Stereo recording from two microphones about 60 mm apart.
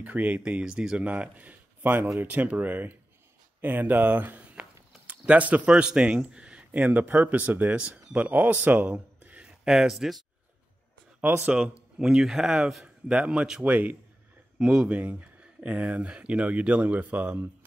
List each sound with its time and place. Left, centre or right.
0.0 s speech: right
8.7 s a sound: right
9.7 s speech: centre
11.4 s speech: centre